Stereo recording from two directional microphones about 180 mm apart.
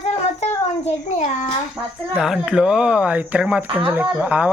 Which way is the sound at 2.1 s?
5° right (ahead or behind).